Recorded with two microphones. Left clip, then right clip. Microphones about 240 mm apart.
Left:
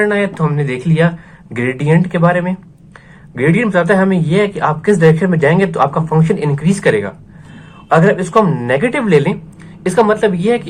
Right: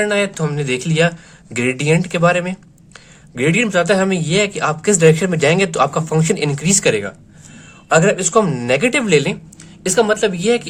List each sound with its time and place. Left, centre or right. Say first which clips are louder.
0.1 s speech: left 2 dB; right